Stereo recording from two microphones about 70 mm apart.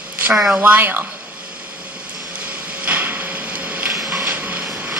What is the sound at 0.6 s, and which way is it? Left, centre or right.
Speech, right.